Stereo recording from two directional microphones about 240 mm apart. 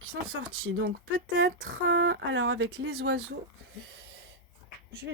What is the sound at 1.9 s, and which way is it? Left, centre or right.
Speech, right.